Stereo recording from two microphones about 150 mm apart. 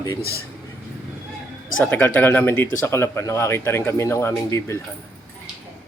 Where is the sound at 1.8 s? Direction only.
15° left (ahead or behind).